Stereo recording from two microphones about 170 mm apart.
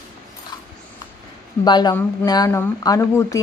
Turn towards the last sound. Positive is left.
turn(degrees=15)  # may be behind; listen again after turning